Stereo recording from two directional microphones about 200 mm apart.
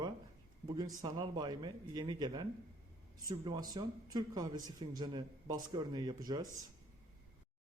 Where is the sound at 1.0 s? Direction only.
20° right (ahead or behind).